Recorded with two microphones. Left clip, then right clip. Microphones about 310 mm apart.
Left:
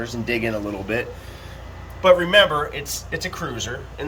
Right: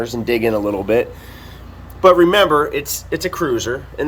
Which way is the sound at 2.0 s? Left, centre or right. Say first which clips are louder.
Right 4 dB; centre.